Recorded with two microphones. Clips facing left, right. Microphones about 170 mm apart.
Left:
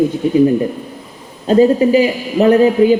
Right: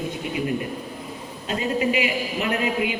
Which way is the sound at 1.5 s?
35° left (ahead or behind).